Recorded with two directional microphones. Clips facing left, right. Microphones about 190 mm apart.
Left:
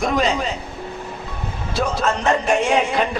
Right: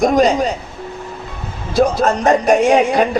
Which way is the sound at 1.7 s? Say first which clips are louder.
Right 7 dB; 35° right (ahead or behind).